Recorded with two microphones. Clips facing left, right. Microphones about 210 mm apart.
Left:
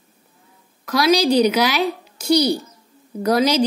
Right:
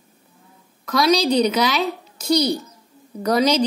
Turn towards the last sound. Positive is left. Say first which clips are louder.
# left 1 dB
turn(degrees=10)  # may be behind; listen again after turning